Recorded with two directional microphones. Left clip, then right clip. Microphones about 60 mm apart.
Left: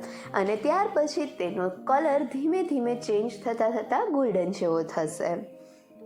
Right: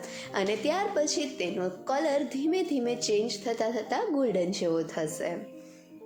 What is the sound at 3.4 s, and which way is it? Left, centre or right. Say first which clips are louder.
A woman's voice: left 3 dB; right.